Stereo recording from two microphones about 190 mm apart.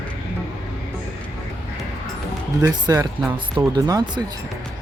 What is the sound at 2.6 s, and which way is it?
Speech, 20° right (ahead or behind).